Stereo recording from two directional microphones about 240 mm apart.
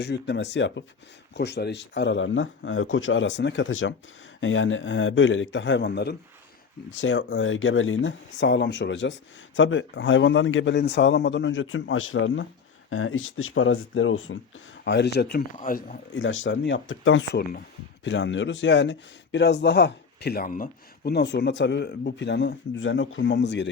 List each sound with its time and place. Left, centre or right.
0.0 s a man's voice: left
14.8 s speech: left
16.1 s a man's voice: left